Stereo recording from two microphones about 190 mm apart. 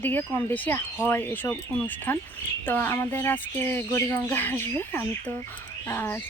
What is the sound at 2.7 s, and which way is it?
Speech, 10° left (ahead or behind).